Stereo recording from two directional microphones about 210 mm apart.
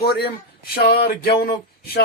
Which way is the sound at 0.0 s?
50° left (ahead or behind).